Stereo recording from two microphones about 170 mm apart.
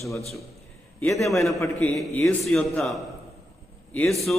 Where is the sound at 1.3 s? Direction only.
Centre (ahead or behind).